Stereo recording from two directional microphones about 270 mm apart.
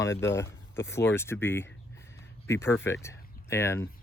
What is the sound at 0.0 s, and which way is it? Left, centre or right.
Speech, centre.